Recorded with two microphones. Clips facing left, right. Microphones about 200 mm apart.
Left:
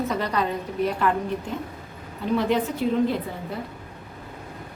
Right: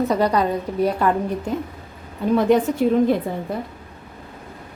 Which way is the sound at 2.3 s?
50° right (ahead or behind).